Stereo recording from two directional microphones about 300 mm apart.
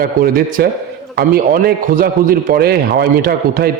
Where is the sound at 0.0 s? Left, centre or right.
Right.